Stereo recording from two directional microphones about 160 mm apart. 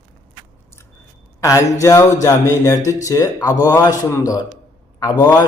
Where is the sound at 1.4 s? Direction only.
20° left (ahead or behind).